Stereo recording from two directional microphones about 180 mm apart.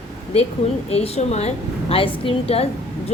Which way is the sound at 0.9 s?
35° left (ahead or behind).